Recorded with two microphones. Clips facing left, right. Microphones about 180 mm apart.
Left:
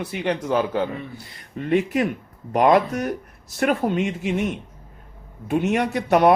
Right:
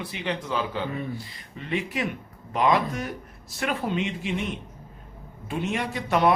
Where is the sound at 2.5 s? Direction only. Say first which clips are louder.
Left 6 dB; 55° left (ahead or behind).